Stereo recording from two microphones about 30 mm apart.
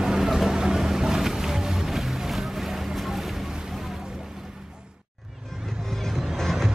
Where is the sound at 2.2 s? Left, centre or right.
Centre.